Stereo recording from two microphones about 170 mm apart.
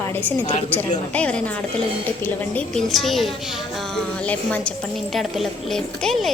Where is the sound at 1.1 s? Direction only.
5° left (ahead or behind).